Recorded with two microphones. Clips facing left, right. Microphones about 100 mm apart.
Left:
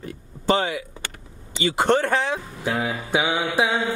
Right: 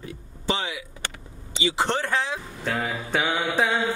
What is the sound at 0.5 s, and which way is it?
Speech, 50° left (ahead or behind).